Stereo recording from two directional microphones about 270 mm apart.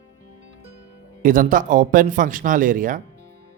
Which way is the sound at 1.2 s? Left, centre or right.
Right.